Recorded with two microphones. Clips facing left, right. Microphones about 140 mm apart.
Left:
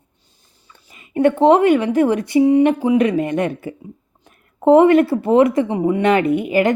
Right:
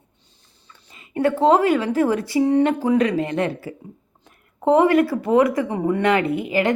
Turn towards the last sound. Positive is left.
turn(degrees=20)  # may be behind; listen again after turning